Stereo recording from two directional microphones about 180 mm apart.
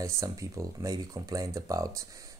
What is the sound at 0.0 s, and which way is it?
Speech, 15° right (ahead or behind).